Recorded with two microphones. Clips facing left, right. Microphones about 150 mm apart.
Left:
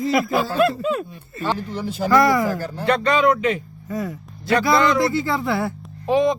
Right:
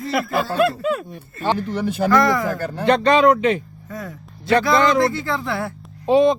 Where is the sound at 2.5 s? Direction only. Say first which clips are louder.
Right 2 dB; 60° right (ahead or behind).